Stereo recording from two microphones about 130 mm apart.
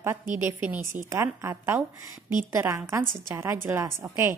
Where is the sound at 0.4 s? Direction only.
15° right (ahead or behind).